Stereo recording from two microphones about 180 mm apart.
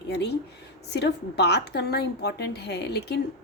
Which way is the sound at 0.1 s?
70° left (ahead or behind).